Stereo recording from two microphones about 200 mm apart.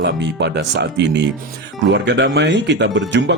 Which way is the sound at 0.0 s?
60° right (ahead or behind).